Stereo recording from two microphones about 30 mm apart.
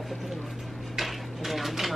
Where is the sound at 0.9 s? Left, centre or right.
Centre.